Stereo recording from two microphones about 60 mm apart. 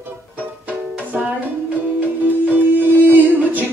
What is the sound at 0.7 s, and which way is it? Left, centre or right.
Music, right.